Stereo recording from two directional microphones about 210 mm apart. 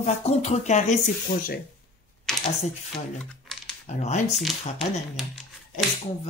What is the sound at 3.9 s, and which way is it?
Speech, 35° left (ahead or behind).